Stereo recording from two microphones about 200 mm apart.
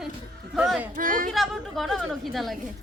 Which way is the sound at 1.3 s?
Centre (ahead or behind).